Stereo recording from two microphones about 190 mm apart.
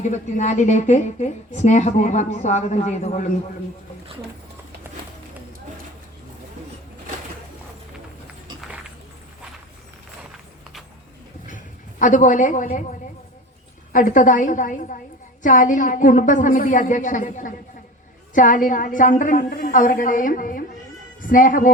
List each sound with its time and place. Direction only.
0.0 s a woman's voice: 40° left (ahead or behind)
11.4 s a sound: 40° left (ahead or behind)
13.9 s a woman's voice: 45° left (ahead or behind)